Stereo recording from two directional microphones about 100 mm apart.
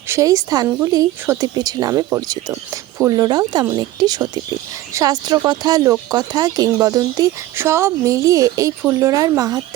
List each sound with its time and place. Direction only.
0.1 s speech: 35° right (ahead or behind)
2.5 s speech: 25° right (ahead or behind)
3.1 s speech: 40° right (ahead or behind)